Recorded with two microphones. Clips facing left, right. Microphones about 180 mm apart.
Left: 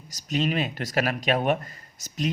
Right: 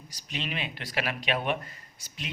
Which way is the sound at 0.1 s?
45° left (ahead or behind).